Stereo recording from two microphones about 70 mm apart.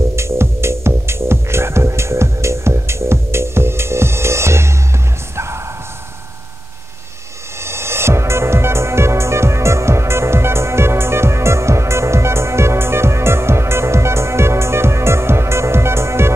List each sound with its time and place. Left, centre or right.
0.1 s music: right
5.3 s bow-wow: right
7.6 s music: right